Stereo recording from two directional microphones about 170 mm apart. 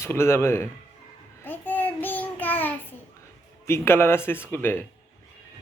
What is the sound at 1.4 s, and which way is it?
Child singing, 10° left (ahead or behind).